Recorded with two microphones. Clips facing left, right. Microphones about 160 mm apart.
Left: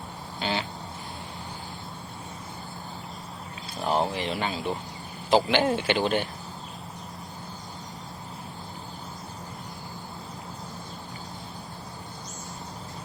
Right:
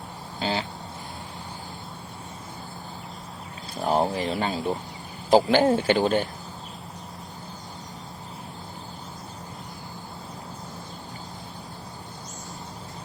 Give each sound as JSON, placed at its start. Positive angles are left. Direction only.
{"t": 0.3, "sound": "speech", "side_deg": -35}
{"t": 3.8, "sound": "speech", "side_deg": -40}